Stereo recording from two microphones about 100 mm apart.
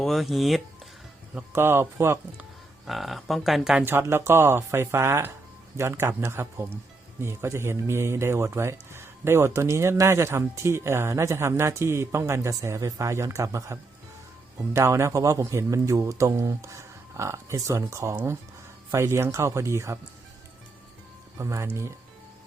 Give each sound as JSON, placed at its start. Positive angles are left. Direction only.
{"t": 0.0, "sound": "speech", "side_deg": 0}
{"t": 1.5, "sound": "speech", "side_deg": -25}
{"t": 2.8, "sound": "speech", "side_deg": 0}
{"t": 3.8, "sound": "a man's voice", "side_deg": -25}
{"t": 21.3, "sound": "speech", "side_deg": -30}